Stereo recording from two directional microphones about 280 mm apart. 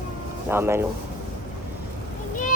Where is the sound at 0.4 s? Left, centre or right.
Centre.